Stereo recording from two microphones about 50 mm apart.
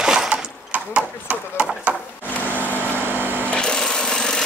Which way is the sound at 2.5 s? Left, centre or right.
Left.